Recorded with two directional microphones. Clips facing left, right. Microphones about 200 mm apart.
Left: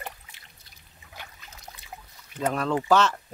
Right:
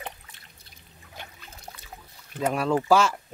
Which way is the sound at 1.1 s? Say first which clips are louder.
Right 2 dB; 30° right (ahead or behind).